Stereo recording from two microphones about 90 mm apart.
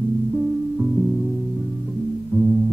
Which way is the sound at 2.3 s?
25° right (ahead or behind).